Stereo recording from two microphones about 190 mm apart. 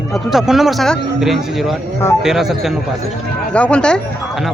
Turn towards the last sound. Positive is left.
turn(degrees=0)  # may be behind; listen again after turning